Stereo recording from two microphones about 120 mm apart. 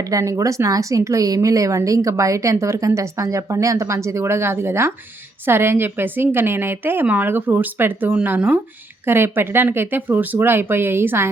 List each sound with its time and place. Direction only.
0.0 s a woman's voice: 25° right (ahead or behind)